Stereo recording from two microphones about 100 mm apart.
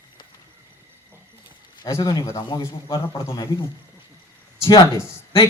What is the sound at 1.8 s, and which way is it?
Speech, 35° left (ahead or behind).